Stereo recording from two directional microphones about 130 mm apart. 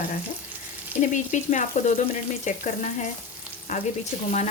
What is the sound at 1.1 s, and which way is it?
Speech, 75° left (ahead or behind).